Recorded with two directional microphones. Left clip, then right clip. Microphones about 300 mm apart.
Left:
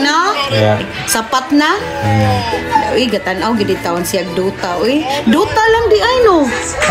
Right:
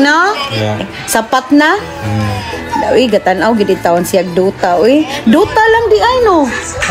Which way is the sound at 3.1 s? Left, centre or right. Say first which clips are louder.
Right 5 dB; right.